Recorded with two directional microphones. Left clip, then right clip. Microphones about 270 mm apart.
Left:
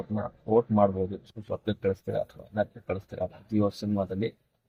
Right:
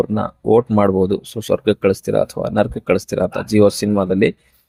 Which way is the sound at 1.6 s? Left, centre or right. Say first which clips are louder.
Right 11 dB; right.